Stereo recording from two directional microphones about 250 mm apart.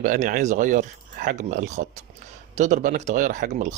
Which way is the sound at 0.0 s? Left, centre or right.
Right.